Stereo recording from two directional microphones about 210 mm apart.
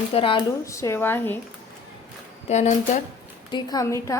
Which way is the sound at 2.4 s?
35° left (ahead or behind).